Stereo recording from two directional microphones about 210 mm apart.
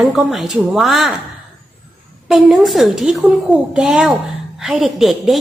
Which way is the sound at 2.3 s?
Centre (ahead or behind).